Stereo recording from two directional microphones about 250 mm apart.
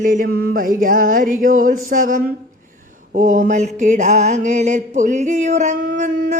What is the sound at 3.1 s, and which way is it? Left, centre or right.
Mantra, right.